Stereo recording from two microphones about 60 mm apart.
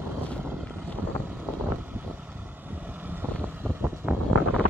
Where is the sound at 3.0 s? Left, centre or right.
Right.